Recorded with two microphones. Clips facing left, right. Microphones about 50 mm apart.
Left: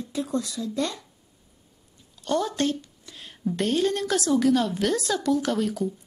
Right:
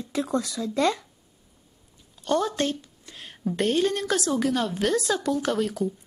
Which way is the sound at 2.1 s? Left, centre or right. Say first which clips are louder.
Right 1 dB; centre.